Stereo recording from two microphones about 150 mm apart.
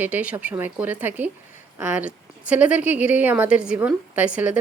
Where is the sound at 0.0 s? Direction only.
10° right (ahead or behind).